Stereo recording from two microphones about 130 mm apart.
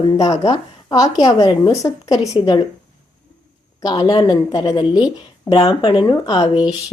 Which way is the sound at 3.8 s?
35° left (ahead or behind).